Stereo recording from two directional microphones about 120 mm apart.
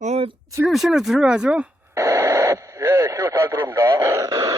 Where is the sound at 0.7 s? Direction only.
Centre (ahead or behind).